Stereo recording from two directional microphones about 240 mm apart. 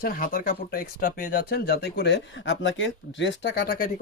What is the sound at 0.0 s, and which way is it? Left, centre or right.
Speech, left.